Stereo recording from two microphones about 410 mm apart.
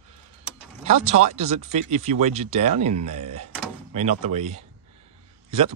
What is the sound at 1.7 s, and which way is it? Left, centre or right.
Speech, centre.